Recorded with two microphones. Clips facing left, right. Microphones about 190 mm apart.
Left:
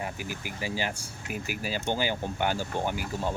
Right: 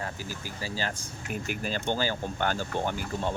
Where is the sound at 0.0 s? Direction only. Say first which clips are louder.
Left 1 dB; 15° left (ahead or behind).